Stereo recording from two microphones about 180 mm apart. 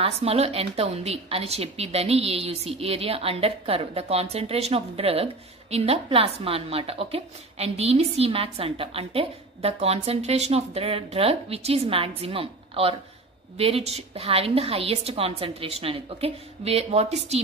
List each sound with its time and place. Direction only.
0.0 s a woman's voice: 35° right (ahead or behind)